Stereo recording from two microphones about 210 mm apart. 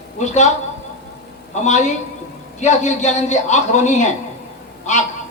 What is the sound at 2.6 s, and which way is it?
A man's voice, 35° left (ahead or behind).